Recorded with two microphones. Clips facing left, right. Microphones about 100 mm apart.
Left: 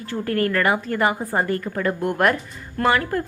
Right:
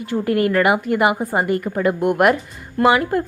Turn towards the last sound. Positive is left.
turn(degrees=-15)  # may be behind; listen again after turning